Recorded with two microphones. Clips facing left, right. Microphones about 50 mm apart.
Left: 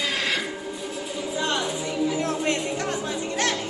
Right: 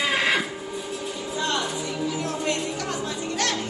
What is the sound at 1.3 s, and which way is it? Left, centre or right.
Music, centre.